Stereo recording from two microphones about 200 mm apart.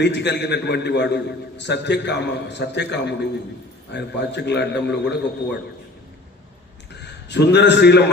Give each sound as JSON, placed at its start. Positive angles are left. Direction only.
{"t": 0.0, "sound": "a man's voice", "side_deg": 60}
{"t": 7.0, "sound": "a man's voice", "side_deg": 60}